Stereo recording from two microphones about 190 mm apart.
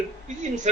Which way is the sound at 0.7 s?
35° right (ahead or behind).